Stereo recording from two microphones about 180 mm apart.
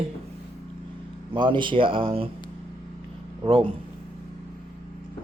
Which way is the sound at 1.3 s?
25° right (ahead or behind).